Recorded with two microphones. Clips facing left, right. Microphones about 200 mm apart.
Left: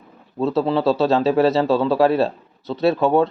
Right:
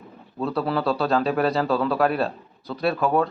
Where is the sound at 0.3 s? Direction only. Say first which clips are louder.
Left 5 dB; 25° left (ahead or behind).